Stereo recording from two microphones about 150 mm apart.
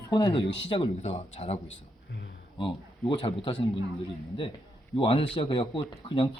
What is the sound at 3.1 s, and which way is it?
Speech, 35° left (ahead or behind).